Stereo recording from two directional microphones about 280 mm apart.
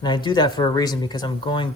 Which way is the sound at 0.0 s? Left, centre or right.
Centre.